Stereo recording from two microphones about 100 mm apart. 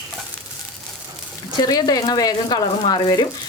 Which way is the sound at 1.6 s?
40° left (ahead or behind).